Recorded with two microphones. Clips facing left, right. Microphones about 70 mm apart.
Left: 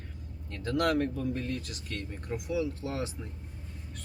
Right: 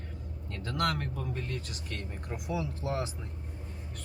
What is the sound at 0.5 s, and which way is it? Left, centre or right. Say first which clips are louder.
Speech: left 4 dB; centre.